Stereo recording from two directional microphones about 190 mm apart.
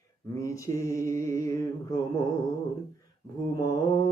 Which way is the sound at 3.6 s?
15° left (ahead or behind).